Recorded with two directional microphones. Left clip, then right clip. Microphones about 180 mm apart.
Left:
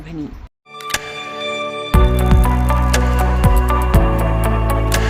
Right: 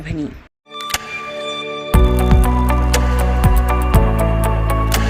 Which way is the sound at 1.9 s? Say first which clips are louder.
Right 1 dB; centre (ahead or behind).